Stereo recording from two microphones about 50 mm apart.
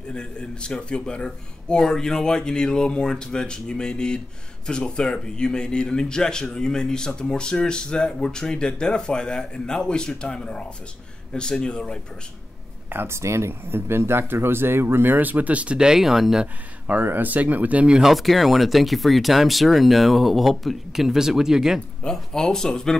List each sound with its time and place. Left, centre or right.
0.1 s a man's voice: centre
12.9 s speech: right
13.5 s speech: right; by 16.4 s centre
16.8 s speech: right
18.1 s speech: centre
22.0 s a man's voice: centre